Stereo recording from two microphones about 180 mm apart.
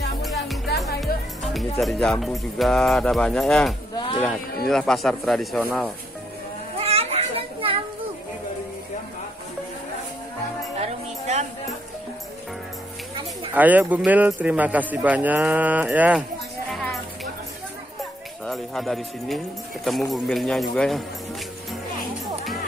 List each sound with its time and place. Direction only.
0.2 s music: centre (ahead or behind)
1.8 s speech: centre (ahead or behind)
3.9 s a sound: 25° left (ahead or behind)
4.6 s speech: centre (ahead or behind)
6.8 s children playing: 35° right (ahead or behind)
10.8 s music: 40° right (ahead or behind)
13.6 s speech: 10° right (ahead or behind)
16.7 s music: centre (ahead or behind)
18.4 s speech: centre (ahead or behind)